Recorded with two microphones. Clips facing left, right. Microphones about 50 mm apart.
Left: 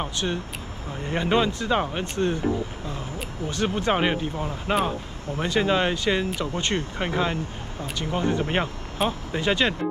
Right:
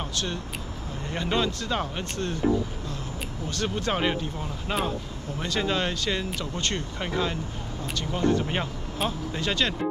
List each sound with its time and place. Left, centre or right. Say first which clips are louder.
0.0 s speech: left 4 dB; left
3.4 s speech: left 4 dB; centre